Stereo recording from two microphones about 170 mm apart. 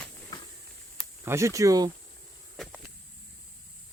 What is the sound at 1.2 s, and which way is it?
Speech, 15° right (ahead or behind).